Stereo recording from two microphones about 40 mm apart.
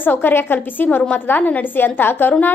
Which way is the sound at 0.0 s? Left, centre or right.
Left.